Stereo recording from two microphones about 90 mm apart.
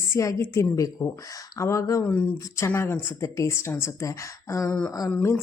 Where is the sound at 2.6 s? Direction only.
30° left (ahead or behind).